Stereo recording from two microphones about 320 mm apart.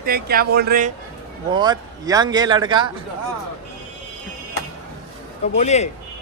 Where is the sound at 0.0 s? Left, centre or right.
Right.